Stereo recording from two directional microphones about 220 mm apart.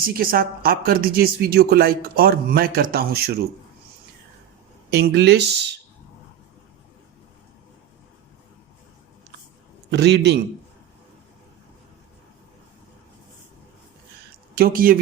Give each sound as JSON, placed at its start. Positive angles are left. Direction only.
{"t": 0.0, "sound": "a woman's voice", "side_deg": -40}
{"t": 4.9, "sound": "a woman's voice", "side_deg": -50}
{"t": 9.9, "sound": "a woman's voice", "side_deg": -50}
{"t": 14.5, "sound": "speech", "side_deg": -40}